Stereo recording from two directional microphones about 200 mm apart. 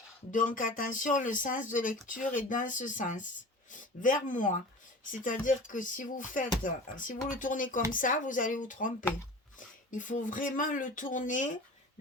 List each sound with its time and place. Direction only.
0.3 s speech: 40° left (ahead or behind)